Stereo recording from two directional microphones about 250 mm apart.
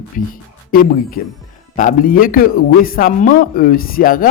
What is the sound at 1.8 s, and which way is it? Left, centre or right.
A man's voice, left.